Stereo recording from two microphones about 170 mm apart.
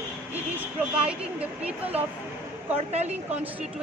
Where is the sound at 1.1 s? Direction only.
10° right (ahead or behind).